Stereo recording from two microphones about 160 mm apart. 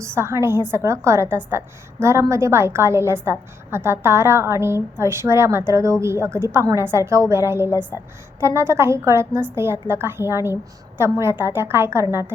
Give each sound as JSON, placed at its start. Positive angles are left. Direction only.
{"t": 0.0, "sound": "a woman's voice", "side_deg": -15}